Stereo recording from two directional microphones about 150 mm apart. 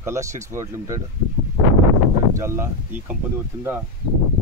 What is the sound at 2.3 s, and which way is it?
Speech, 20° right (ahead or behind).